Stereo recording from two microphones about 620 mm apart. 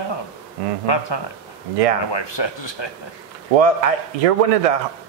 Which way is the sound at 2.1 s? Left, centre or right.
Left.